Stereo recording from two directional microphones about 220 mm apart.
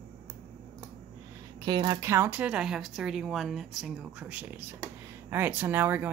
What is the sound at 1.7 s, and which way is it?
Speech, 20° right (ahead or behind).